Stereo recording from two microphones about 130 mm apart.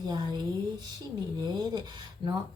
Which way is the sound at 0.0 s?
30° right (ahead or behind).